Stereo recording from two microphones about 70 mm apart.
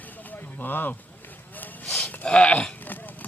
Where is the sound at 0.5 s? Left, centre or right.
Left.